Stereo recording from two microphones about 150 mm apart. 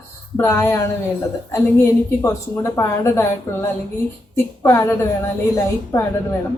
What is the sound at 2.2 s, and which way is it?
A woman's voice, 20° left (ahead or behind).